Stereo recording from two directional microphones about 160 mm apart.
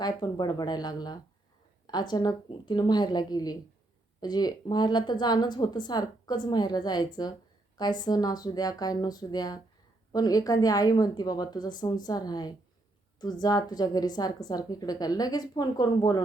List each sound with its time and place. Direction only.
0.0 s a woman's voice: 25° left (ahead or behind)